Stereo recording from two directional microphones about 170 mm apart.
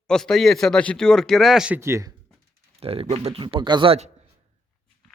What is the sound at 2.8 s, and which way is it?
Speech, 35° right (ahead or behind).